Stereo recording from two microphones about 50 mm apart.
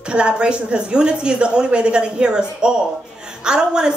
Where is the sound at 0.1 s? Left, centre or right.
Centre.